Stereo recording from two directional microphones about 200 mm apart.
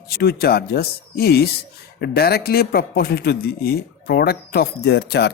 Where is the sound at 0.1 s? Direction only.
50° left (ahead or behind).